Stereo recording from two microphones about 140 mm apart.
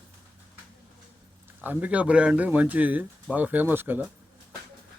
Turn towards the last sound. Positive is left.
turn(degrees=-15)  # may be behind; listen again after turning